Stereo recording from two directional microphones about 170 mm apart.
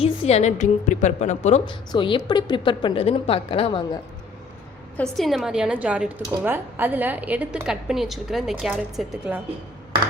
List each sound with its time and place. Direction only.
0.0 s a woman's voice: 40° left (ahead or behind)
1.9 s a woman's voice: 30° left (ahead or behind)
4.9 s speech: centre (ahead or behind)